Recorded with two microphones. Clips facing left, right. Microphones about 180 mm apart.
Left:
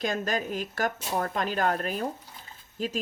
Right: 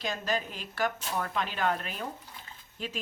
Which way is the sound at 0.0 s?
45° left (ahead or behind).